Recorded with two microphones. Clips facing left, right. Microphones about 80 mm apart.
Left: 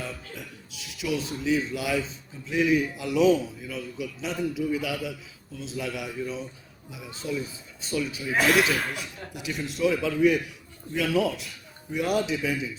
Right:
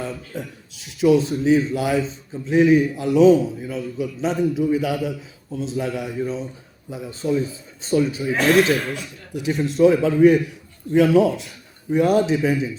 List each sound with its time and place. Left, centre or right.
0.3 s a man's voice: right
8.3 s speech: centre
9.4 s a man's voice: right